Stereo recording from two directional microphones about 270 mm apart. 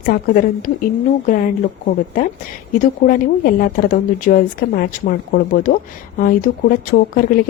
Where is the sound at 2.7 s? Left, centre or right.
Left.